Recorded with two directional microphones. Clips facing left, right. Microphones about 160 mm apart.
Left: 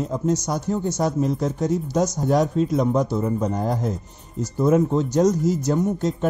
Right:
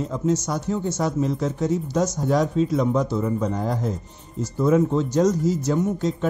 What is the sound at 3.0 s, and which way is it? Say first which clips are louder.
Speech: left 1 dB; 15° left (ahead or behind).